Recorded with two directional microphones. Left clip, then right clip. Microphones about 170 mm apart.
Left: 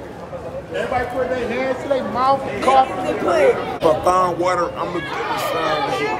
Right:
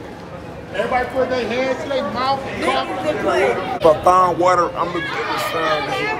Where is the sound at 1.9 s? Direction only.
25° left (ahead or behind).